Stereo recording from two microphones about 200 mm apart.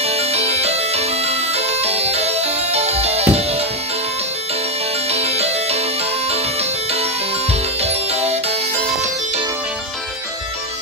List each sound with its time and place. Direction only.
0.0 s music: 30° right (ahead or behind)
5.1 s music: 30° right (ahead or behind)
7.8 s music: 30° right (ahead or behind)